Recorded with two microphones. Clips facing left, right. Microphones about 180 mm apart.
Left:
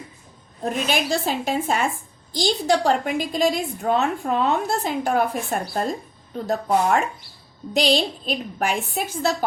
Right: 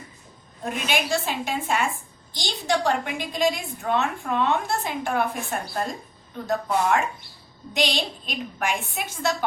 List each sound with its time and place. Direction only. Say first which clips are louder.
0.6 s a woman's voice: left 3 dB; 35° left (ahead or behind)